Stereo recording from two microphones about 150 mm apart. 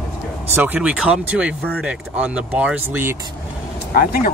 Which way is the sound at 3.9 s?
70° left (ahead or behind).